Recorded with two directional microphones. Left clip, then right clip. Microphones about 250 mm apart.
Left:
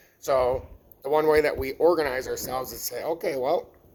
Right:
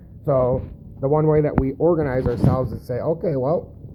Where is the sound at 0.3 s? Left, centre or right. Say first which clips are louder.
Right 4 dB; centre.